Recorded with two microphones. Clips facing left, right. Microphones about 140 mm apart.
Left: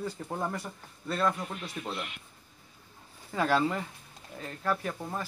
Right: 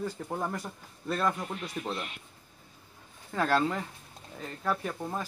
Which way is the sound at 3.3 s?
5° left (ahead or behind).